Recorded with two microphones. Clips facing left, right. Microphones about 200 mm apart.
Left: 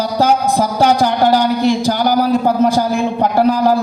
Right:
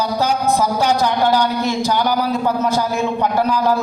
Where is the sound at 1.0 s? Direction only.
30° left (ahead or behind).